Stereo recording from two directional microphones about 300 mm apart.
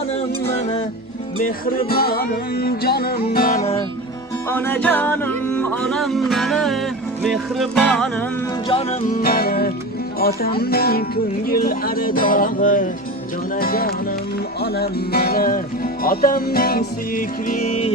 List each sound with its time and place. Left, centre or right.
1.4 s music: left
4.4 s music: centre
8.7 s music: left